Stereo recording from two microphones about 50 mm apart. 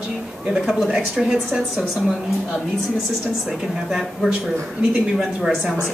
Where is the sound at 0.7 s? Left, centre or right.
Centre.